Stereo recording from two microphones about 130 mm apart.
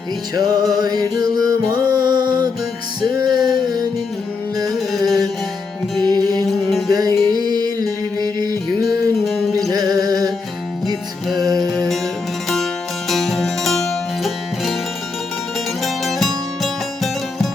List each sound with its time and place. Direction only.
0.3 s music: 30° right (ahead or behind)
4.9 s music: 30° right (ahead or behind)
6.4 s music: centre (ahead or behind)
6.9 s music: 30° right (ahead or behind)
8.9 s music: centre (ahead or behind)
9.6 s music: 30° right (ahead or behind)
11.3 s music: 30° right (ahead or behind)
11.7 s music: centre (ahead or behind)
13.1 s music: centre (ahead or behind)
15.8 s music: centre (ahead or behind)